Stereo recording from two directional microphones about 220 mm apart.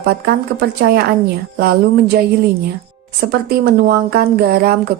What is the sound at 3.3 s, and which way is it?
A woman's voice, 45° right (ahead or behind).